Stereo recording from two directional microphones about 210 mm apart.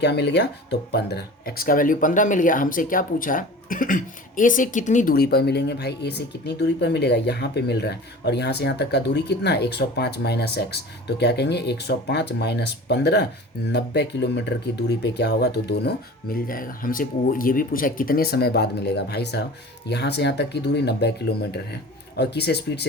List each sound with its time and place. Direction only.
0.0 s speech: 55° left (ahead or behind)